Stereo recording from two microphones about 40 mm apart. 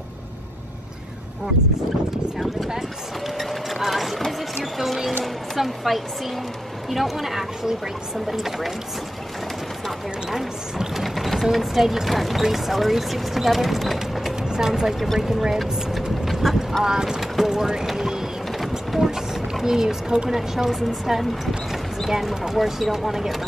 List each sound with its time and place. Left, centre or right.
2.3 s speech: centre
3.3 s clip-clop: centre
4.3 s speech: centre
10.3 s speech: centre
14.5 s speech: centre
16.3 s clip-clop: centre
16.8 s speech: centre
17.8 s a sound: centre
19.6 s speech: centre